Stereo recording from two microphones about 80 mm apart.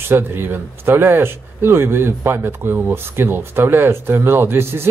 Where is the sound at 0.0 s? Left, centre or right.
Right.